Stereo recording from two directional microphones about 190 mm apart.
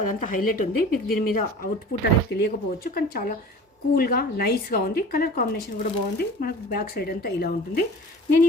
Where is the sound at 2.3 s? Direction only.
60° left (ahead or behind).